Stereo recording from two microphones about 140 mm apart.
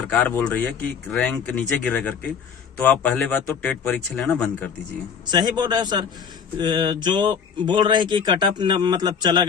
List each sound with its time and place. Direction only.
0.1 s speech: 10° left (ahead or behind)
5.2 s speech: 30° right (ahead or behind)